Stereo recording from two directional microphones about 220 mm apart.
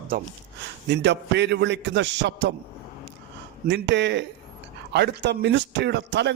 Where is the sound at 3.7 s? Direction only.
50° right (ahead or behind).